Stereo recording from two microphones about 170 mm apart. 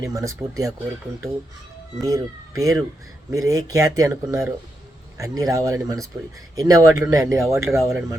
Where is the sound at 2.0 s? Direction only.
20° right (ahead or behind).